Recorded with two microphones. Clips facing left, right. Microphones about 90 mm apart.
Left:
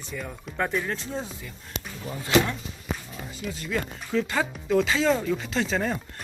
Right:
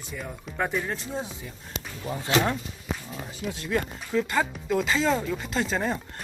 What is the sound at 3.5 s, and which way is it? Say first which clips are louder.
Speech: right 2 dB; 20° right (ahead or behind).